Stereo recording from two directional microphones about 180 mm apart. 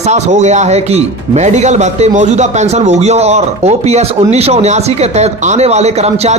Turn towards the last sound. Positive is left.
turn(degrees=-35)  # may be behind; listen again after turning